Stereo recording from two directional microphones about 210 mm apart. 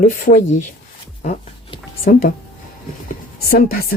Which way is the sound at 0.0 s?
40° left (ahead or behind).